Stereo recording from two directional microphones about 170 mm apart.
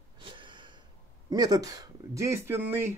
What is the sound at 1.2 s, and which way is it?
Speech, 25° right (ahead or behind).